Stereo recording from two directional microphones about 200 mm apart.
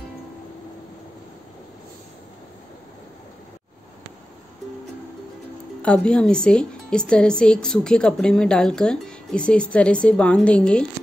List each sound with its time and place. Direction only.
5.8 s speech: 5° left (ahead or behind)